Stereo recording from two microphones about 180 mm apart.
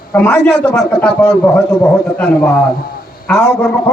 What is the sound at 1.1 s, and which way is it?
Speech, 5° left (ahead or behind).